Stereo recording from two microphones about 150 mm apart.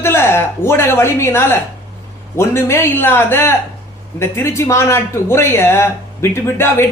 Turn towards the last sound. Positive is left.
turn(degrees=15)  # may be behind; listen again after turning